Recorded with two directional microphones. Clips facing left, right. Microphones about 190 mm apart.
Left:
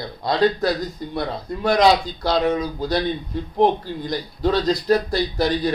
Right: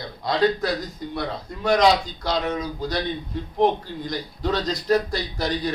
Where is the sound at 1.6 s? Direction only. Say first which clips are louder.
Left 2 dB; 35° left (ahead or behind).